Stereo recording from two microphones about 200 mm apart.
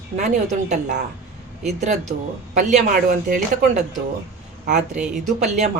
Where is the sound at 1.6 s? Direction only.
35° right (ahead or behind).